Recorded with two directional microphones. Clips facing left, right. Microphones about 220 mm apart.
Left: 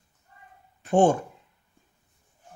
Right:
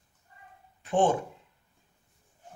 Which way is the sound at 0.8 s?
45° left (ahead or behind).